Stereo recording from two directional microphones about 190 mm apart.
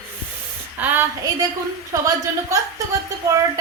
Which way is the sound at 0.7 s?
10° right (ahead or behind).